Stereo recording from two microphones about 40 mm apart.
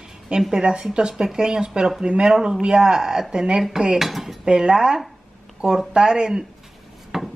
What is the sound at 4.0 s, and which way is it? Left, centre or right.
Speech, centre.